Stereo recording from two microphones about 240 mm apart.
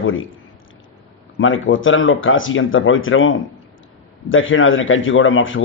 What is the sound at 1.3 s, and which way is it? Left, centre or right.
Speech, left.